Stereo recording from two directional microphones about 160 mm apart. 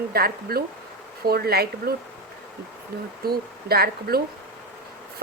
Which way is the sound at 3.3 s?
75° right (ahead or behind).